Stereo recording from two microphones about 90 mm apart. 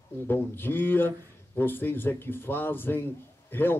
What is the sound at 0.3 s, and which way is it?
A man's voice, 25° left (ahead or behind).